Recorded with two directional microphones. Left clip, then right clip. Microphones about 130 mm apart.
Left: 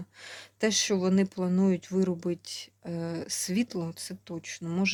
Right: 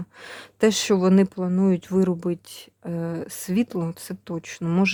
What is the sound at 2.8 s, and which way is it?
Speech, 30° right (ahead or behind).